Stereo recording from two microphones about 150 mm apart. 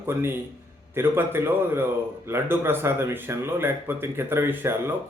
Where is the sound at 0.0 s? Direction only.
15° right (ahead or behind).